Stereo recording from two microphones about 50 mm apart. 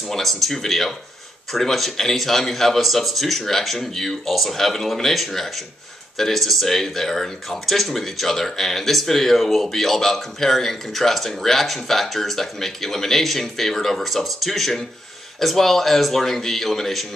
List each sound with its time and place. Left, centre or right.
0.0 s speech: centre